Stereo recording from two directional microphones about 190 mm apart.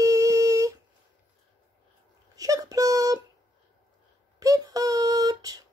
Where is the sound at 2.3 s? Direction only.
20° right (ahead or behind).